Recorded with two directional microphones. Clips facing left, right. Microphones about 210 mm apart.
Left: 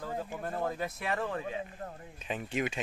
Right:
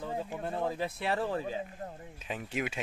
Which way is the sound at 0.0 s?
20° right (ahead or behind).